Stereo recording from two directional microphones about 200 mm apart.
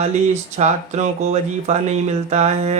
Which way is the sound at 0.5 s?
35° right (ahead or behind).